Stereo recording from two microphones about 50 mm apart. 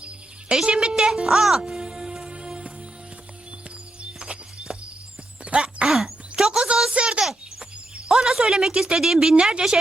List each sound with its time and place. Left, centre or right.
0.5 s a woman's voice: centre
0.9 s music: centre
4.0 s music: right
5.4 s a sound: centre
9.3 s a woman's voice: centre